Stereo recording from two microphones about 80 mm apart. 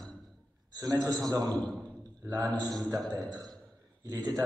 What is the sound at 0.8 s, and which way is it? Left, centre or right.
A man's voice, right.